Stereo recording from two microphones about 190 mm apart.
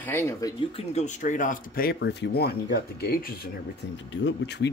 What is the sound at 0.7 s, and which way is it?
Speech, 35° left (ahead or behind).